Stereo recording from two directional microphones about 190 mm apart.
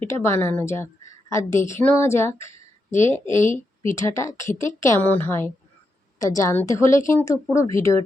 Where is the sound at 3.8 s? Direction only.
15° left (ahead or behind).